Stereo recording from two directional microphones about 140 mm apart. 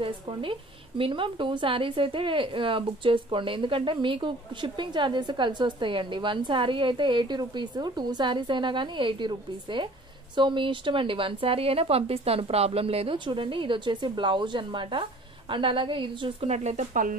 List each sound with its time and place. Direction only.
0.0 s a woman's voice: 40° right (ahead or behind)
16.4 s speech: 50° right (ahead or behind); by 17.2 s 75° right (ahead or behind)